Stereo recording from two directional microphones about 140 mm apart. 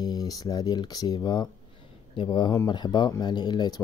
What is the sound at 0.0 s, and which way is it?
Speech, 30° left (ahead or behind).